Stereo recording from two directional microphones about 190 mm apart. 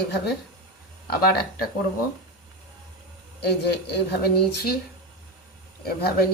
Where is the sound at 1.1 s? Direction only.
50° left (ahead or behind).